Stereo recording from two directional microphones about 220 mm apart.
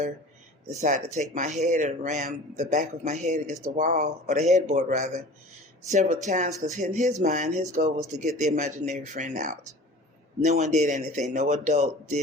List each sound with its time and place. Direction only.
0.7 s speech: 35° right (ahead or behind)